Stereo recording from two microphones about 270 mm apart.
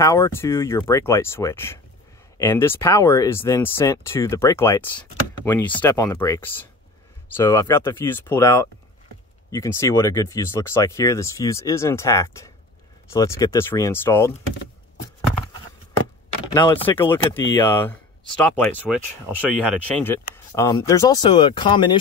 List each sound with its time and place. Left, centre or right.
0.0 s speech: centre
16.5 s speech: centre
20.1 s speech: centre